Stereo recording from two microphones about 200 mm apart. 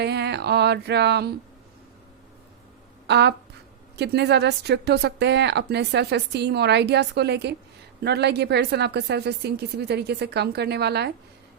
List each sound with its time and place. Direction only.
0.0 s a woman's voice: 55° right (ahead or behind)
3.1 s a woman's voice: 55° right (ahead or behind)